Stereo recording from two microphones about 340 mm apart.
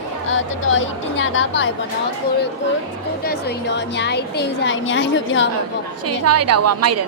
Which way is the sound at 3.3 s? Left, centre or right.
Left.